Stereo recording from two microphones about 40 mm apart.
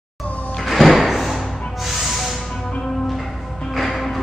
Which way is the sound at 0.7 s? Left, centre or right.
Centre.